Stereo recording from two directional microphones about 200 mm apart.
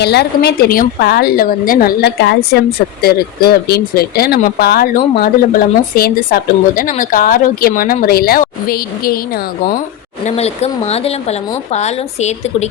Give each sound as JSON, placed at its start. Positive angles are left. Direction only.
{"t": 0.0, "sound": "a woman's voice", "side_deg": 55}
{"t": 10.2, "sound": "a woman's voice", "side_deg": 30}